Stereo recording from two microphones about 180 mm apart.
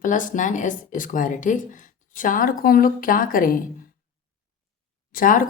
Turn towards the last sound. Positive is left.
turn(degrees=50)  # may be behind; listen again after turning